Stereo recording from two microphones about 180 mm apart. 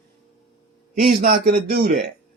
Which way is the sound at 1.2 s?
60° right (ahead or behind).